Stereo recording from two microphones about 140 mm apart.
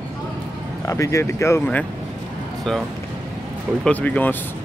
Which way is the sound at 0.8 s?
20° left (ahead or behind).